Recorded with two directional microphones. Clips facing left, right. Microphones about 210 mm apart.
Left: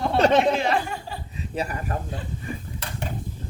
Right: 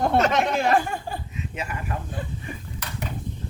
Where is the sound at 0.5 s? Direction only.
50° right (ahead or behind).